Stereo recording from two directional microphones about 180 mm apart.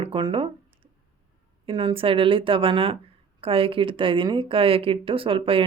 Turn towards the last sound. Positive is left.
turn(degrees=-30)  # may be behind; listen again after turning